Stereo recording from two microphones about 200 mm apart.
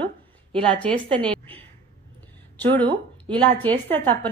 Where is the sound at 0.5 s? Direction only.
25° right (ahead or behind).